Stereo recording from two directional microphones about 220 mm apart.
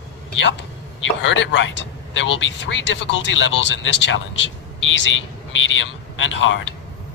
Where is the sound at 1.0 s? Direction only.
55° left (ahead or behind).